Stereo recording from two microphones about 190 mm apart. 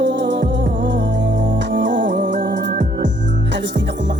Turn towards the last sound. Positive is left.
turn(degrees=-65)  # may be behind; listen again after turning